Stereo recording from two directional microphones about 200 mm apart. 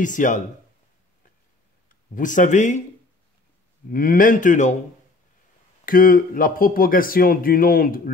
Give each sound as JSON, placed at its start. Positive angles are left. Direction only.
{"t": 0.0, "sound": "speech", "side_deg": 40}
{"t": 1.9, "sound": "speech", "side_deg": 40}
{"t": 3.9, "sound": "speech", "side_deg": 45}
{"t": 5.9, "sound": "speech", "side_deg": 45}